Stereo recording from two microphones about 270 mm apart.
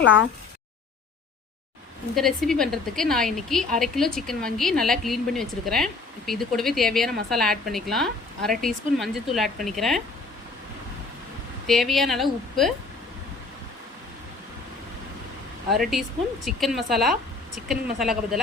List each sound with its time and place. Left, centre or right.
0.0 s speech: left
2.1 s a woman's voice: centre
11.6 s a woman's voice: centre
15.7 s a woman's voice: centre